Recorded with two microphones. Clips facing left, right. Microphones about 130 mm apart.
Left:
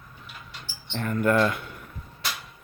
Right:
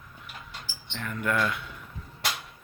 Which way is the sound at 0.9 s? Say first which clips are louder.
Left 6 dB; 45° left (ahead or behind).